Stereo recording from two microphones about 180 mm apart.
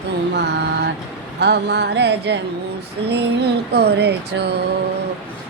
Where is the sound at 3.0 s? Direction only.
65° right (ahead or behind).